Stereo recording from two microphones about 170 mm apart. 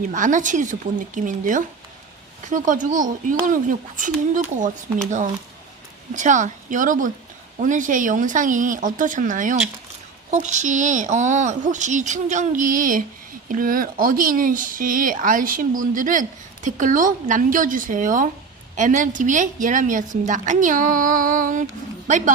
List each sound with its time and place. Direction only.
0.1 s a woman's voice: 50° right (ahead or behind)
6.1 s a woman's voice: 45° right (ahead or behind)